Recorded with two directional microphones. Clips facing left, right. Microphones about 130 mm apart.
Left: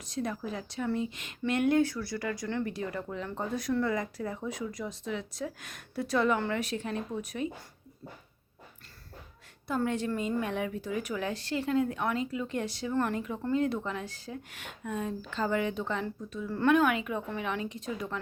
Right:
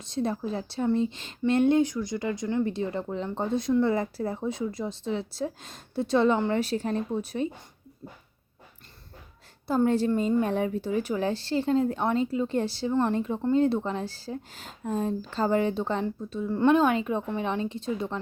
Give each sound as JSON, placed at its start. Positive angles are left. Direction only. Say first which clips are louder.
{"t": 0.0, "sound": "speech", "louder": "right 5 dB", "side_deg": -25}
{"t": 9.6, "sound": "speech", "louder": "right 7 dB", "side_deg": -35}
{"t": 16.5, "sound": "speech", "louder": "right 4 dB", "side_deg": -20}